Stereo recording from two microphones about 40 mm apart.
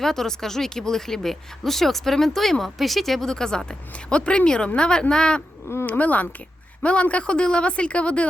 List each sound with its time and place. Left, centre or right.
0.0 s speech: centre
5.8 s speech: left